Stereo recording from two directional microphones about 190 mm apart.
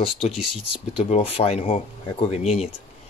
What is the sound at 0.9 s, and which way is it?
Speech, 30° left (ahead or behind).